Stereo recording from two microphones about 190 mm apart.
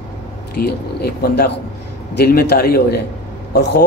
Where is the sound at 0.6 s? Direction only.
55° left (ahead or behind).